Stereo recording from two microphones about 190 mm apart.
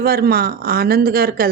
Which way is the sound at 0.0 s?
55° right (ahead or behind).